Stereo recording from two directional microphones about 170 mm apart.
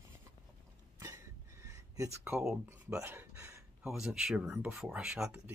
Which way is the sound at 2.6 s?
15° right (ahead or behind).